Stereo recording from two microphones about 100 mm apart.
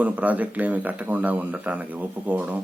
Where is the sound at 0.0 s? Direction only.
15° right (ahead or behind).